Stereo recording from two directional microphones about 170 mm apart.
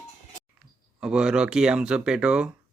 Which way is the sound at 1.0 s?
5° right (ahead or behind).